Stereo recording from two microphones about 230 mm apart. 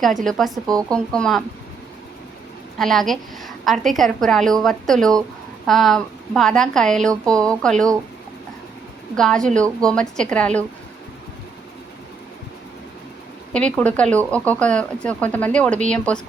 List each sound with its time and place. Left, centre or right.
0.3 s speech: centre
2.7 s speech: centre
9.1 s speech: centre
13.5 s speech: centre